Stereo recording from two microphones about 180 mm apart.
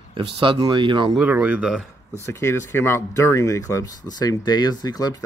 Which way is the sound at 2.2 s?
15° left (ahead or behind).